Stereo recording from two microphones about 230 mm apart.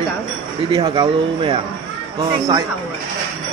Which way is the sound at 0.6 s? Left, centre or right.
Centre.